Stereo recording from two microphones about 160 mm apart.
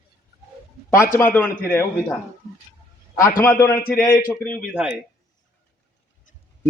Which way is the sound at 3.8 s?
60° left (ahead or behind).